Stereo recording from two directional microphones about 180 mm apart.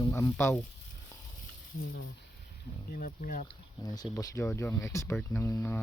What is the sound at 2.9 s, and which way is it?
Speech, 55° left (ahead or behind).